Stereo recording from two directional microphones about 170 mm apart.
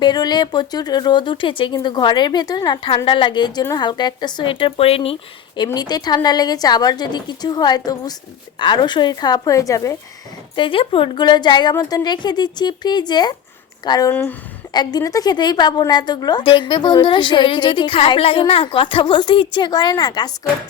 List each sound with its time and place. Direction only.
0.0 s a woman's voice: 25° left (ahead or behind)
5.6 s a woman's voice: 25° left (ahead or behind)
10.5 s a woman's voice: 30° left (ahead or behind)
14.1 s speech: 10° left (ahead or behind)
14.7 s a woman's voice: 25° left (ahead or behind)